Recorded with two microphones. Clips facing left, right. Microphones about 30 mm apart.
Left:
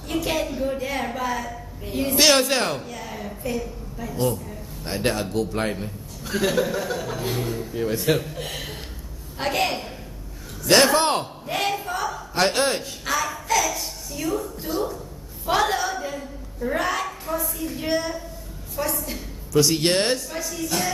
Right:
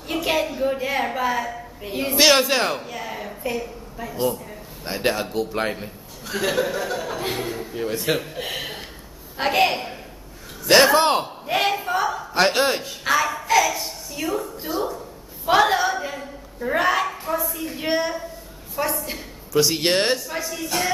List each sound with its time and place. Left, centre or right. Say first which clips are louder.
0.1 s a woman's voice: right 2 dB; centre
7.2 s a man's voice: right 1 dB; right; by 11.2 s centre
11.4 s a sound: right 5 dB; centre
12.4 s a woman's voice: even; centre
13.0 s a sound: right 7 dB; centre
15.0 s a woman's voice: right 1 dB; centre
17.4 s a woman's voice: right 2 dB; centre
17.6 s a woman's voice: right 2 dB; right
19.6 s a woman's voice: right 1 dB; centre